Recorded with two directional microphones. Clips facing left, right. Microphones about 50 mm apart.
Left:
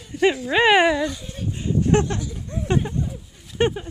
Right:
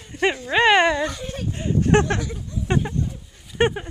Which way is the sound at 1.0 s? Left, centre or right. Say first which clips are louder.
Right 1 dB; right.